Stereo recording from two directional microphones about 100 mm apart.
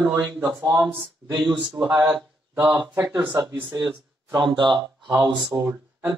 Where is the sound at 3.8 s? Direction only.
45° right (ahead or behind).